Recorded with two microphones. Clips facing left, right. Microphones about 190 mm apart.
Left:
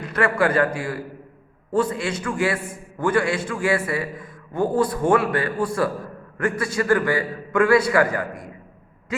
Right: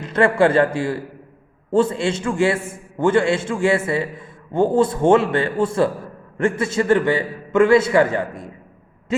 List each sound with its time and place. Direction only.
0.0 s a man's voice: 25° right (ahead or behind)